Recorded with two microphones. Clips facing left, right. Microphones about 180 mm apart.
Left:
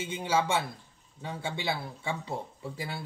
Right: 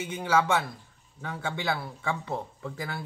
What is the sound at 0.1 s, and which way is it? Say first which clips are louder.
Speech: right 3 dB; 20° left (ahead or behind).